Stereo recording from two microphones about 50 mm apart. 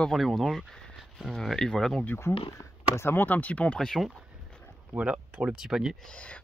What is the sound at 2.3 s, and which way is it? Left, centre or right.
Speech, left.